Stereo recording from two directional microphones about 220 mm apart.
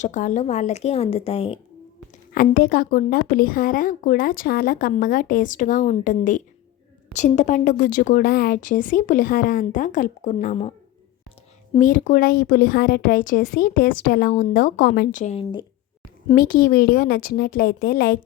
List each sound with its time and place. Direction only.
0.0 s speech: 35° left (ahead or behind)
2.3 s a woman's voice: 40° left (ahead or behind)
11.7 s a woman's voice: 35° left (ahead or behind)
16.3 s a woman's voice: 40° left (ahead or behind)